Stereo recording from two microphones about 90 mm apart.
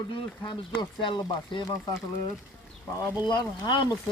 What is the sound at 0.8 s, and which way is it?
Speech, 55° left (ahead or behind).